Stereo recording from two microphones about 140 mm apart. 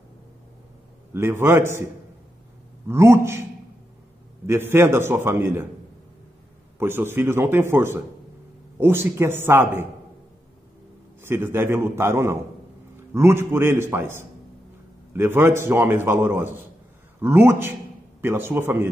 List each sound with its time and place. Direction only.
1.1 s a man's voice: 15° right (ahead or behind)
2.9 s a man's voice: 20° right (ahead or behind)
4.5 s a man's voice: 15° right (ahead or behind)
6.8 s a man's voice: 15° right (ahead or behind)
11.2 s a man's voice: 15° right (ahead or behind)